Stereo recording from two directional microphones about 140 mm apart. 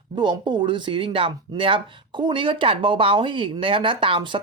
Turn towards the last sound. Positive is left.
turn(degrees=-40)  # may be behind; listen again after turning